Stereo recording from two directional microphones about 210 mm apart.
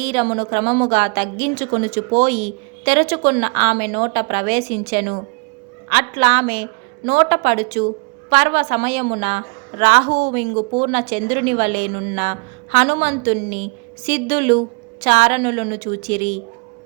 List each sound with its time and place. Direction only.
0.0 s a woman's voice: 30° right (ahead or behind)